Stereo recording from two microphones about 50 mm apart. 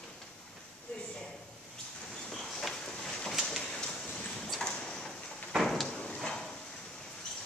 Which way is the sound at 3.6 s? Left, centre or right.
Centre.